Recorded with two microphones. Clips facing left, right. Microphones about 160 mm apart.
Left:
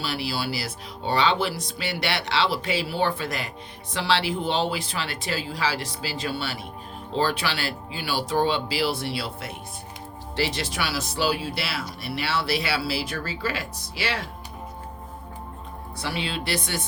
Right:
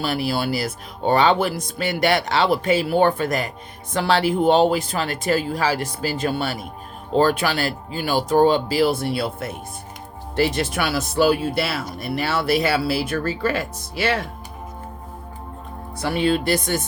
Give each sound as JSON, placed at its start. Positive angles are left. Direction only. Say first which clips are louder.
{"t": 0.0, "sound": "speech", "louder": "right 6 dB", "side_deg": -50}
{"t": 16.0, "sound": "speech", "louder": "right 10 dB", "side_deg": -50}